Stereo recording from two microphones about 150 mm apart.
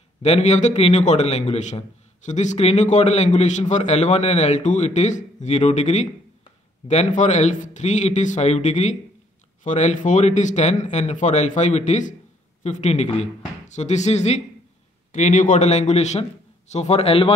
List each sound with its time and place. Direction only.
0.2 s a man's voice: 45° left (ahead or behind)